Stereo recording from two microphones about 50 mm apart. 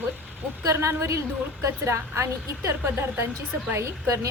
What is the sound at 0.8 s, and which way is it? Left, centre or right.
A woman's voice, right.